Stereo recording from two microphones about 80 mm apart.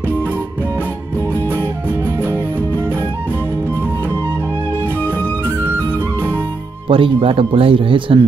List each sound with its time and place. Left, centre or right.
6.9 s speech: right